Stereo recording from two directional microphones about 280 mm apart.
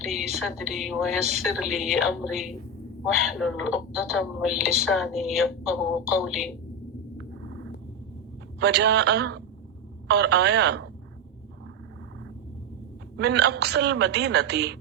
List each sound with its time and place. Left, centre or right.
0.0 s a woman's voice: centre
8.5 s a woman's voice: right
13.1 s a woman's voice: right